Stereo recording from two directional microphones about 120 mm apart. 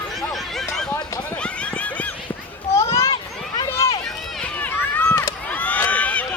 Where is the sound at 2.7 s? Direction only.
25° left (ahead or behind).